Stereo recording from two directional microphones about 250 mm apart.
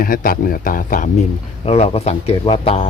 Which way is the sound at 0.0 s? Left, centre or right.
Left.